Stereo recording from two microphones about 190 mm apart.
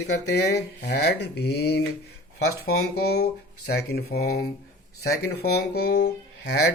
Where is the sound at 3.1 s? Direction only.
60° left (ahead or behind).